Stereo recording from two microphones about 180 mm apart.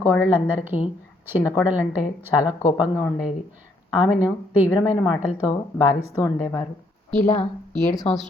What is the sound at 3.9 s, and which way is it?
Speech, 5° right (ahead or behind).